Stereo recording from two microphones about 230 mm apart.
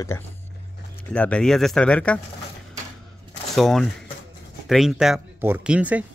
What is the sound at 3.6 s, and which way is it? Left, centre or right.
Speech, centre.